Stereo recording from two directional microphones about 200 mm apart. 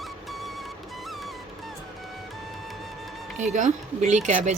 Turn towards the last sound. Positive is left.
turn(degrees=-40)  # may be behind; listen again after turning